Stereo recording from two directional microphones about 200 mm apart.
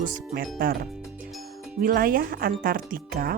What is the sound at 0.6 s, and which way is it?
Speech, 50° right (ahead or behind).